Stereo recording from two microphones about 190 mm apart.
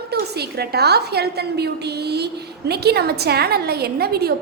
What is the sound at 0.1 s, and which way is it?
A woman's voice, 55° right (ahead or behind).